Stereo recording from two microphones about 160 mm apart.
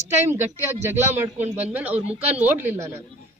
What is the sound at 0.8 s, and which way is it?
A man's voice, 15° right (ahead or behind).